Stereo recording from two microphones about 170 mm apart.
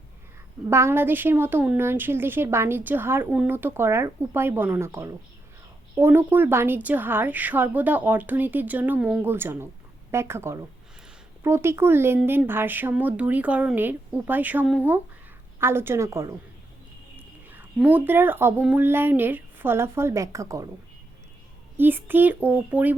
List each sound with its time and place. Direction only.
0.7 s a woman's voice: 15° right (ahead or behind)
17.2 s whispering: 10° right (ahead or behind)
17.7 s a woman's voice: 10° right (ahead or behind)
21.8 s a woman's voice: 10° right (ahead or behind)